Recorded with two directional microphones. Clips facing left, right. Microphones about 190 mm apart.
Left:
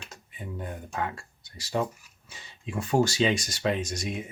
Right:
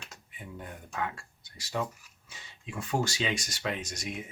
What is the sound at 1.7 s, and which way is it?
Speech, 35° left (ahead or behind).